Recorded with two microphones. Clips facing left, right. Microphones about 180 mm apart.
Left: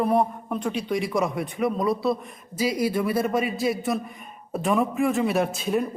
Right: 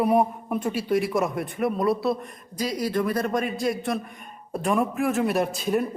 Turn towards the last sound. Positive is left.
turn(degrees=0)  # may be behind; listen again after turning